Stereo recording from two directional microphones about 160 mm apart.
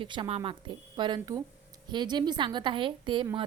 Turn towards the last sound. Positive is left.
turn(degrees=-30)  # may be behind; listen again after turning